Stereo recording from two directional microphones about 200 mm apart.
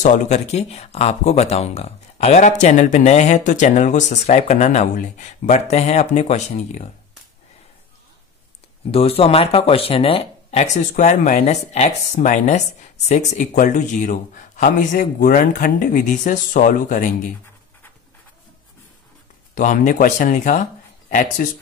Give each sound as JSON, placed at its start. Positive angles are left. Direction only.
{"t": 0.0, "sound": "speech", "side_deg": 35}
{"t": 8.9, "sound": "speech", "side_deg": 30}
{"t": 19.5, "sound": "speech", "side_deg": 40}